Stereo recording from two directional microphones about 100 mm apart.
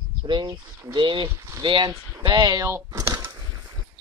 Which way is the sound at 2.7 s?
30° right (ahead or behind).